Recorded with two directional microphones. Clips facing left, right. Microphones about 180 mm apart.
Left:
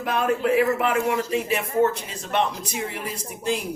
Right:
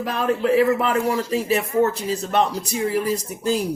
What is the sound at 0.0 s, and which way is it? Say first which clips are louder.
Speech: right 1 dB; 35° right (ahead or behind).